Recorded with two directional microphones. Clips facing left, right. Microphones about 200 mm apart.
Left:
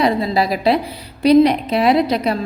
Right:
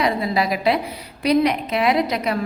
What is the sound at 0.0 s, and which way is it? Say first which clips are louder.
A woman's voice: left 4 dB; 30° left (ahead or behind).